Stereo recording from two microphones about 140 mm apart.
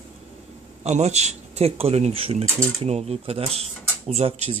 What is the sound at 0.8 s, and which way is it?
Speech, 50° right (ahead or behind).